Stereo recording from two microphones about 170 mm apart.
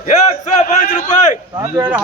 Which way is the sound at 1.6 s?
20° right (ahead or behind).